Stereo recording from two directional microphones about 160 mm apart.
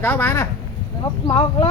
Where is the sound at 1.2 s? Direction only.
25° left (ahead or behind).